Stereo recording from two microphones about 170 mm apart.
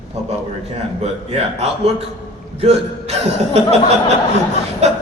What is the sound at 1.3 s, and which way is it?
A man's voice, 40° right (ahead or behind).